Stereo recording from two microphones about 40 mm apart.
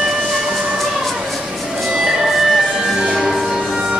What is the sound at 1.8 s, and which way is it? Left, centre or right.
Music, centre.